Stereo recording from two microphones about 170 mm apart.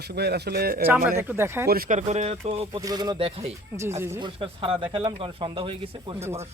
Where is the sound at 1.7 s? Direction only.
55° right (ahead or behind); by 2.8 s 35° right (ahead or behind).